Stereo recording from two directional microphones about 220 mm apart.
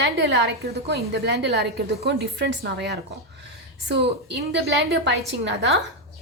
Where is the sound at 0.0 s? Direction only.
50° right (ahead or behind).